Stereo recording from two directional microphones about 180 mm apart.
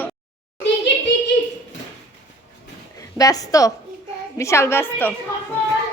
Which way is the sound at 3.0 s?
20° left (ahead or behind).